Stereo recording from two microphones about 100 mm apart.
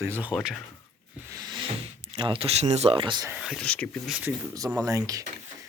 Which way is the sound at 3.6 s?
10° left (ahead or behind).